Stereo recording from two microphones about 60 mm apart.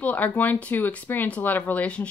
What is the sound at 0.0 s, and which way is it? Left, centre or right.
Speech, left.